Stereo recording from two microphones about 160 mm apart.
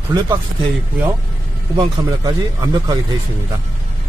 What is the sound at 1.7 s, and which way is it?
Speech, 25° right (ahead or behind).